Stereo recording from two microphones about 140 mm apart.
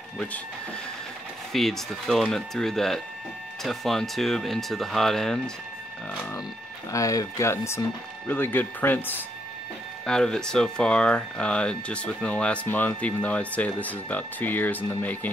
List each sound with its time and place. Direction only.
1.5 s speech: centre (ahead or behind)
6.9 s speech: 25° left (ahead or behind)